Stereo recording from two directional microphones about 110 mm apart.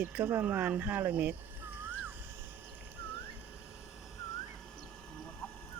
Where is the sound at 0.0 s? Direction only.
15° right (ahead or behind).